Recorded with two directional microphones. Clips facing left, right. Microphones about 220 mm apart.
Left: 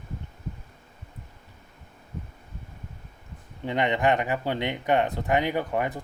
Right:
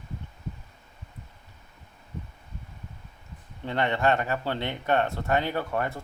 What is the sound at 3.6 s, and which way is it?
Speech, 15° left (ahead or behind).